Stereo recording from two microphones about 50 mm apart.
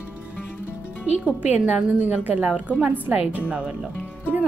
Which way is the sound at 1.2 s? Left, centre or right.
Right.